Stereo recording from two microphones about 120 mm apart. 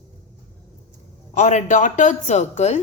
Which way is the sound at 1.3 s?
80° left.